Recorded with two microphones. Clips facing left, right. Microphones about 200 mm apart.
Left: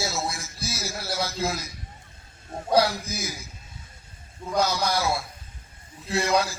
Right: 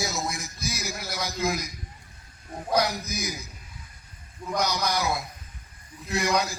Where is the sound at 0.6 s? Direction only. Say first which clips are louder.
Left 1 dB; 15° right (ahead or behind).